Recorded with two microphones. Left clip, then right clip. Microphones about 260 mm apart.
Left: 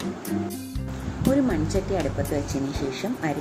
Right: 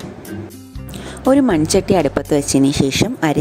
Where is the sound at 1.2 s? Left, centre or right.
Right.